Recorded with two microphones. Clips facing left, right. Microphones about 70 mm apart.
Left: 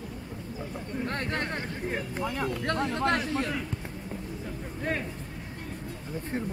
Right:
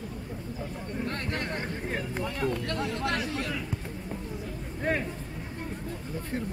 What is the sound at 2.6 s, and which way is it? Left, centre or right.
Speech, left.